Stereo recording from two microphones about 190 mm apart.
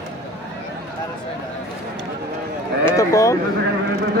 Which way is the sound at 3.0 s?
15° left (ahead or behind).